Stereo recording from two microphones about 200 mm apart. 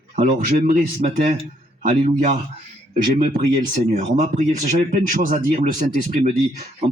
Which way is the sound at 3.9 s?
40° right (ahead or behind).